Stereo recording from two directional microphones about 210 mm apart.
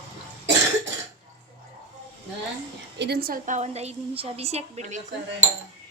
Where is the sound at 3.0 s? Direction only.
50° right (ahead or behind); by 5.0 s 30° right (ahead or behind).